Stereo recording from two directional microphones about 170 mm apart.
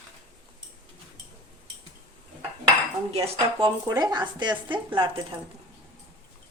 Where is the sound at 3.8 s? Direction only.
25° right (ahead or behind).